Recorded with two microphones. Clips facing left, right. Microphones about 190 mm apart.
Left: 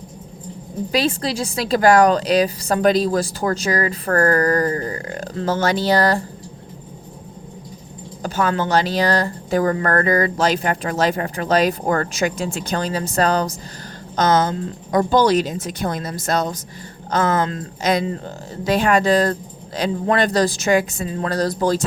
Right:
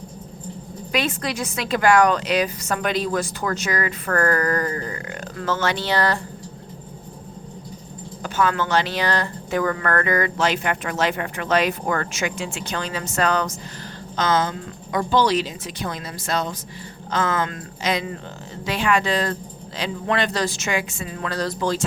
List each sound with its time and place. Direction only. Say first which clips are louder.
0.9 s a woman's voice: left 3 dB; 30° left (ahead or behind)
8.2 s a woman's voice: left 2 dB; 35° left (ahead or behind)